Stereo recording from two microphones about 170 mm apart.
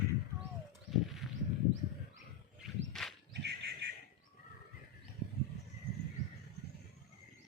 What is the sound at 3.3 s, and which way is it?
Bird, 85° right.